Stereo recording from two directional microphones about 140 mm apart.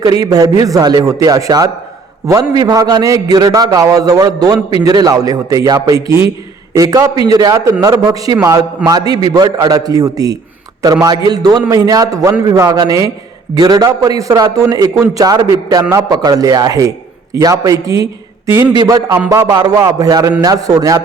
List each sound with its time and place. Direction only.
0.0 s a man's voice: 25° right (ahead or behind)